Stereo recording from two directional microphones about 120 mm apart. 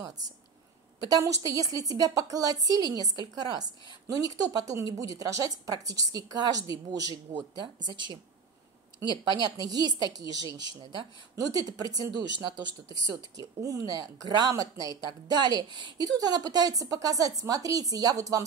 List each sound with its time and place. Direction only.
0.9 s a woman's voice: 30° right (ahead or behind)